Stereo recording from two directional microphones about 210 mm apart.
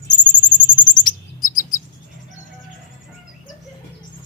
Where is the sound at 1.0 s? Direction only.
40° left (ahead or behind).